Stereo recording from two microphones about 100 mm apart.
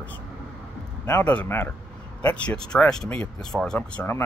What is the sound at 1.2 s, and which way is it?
Speech, 15° left (ahead or behind).